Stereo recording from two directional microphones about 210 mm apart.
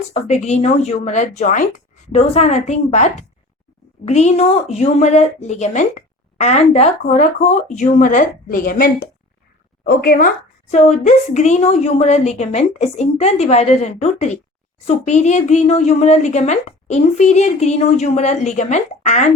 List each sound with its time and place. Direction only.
0.1 s speech: 30° left (ahead or behind)